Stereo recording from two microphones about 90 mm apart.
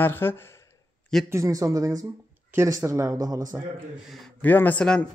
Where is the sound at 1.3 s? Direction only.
35° right (ahead or behind).